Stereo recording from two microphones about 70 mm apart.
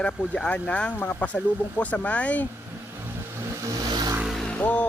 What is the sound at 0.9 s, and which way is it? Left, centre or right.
Speech, left.